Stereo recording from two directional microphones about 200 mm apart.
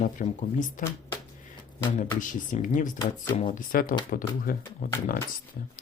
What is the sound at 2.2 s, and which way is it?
Speech, 40° left (ahead or behind).